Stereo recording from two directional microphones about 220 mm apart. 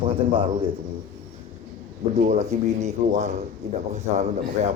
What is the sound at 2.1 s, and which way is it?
A man's voice, 30° right (ahead or behind).